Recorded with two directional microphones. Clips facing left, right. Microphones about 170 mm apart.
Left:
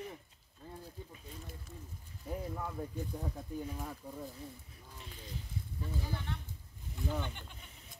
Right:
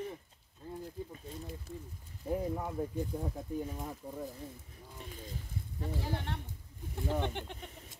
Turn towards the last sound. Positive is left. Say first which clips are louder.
# right 5 dB
turn(degrees=-70)  # may be behind; listen again after turning